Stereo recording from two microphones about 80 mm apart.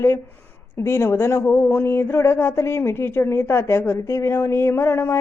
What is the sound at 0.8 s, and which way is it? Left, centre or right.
A woman's voice, left.